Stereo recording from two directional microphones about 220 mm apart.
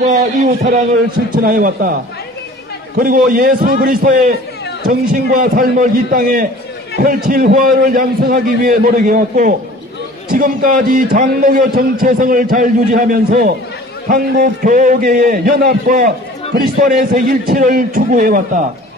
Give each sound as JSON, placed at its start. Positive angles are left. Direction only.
{"t": 0.0, "sound": "a man's voice", "side_deg": -35}
{"t": 3.0, "sound": "a man's voice", "side_deg": -40}